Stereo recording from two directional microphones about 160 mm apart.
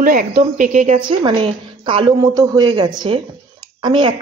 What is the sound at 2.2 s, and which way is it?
Speech, 20° right (ahead or behind).